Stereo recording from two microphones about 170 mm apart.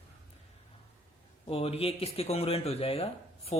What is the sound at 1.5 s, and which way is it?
Speech, 35° left (ahead or behind).